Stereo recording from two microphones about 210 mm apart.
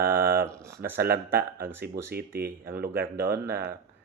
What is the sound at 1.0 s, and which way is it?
Speech, 45° right (ahead or behind).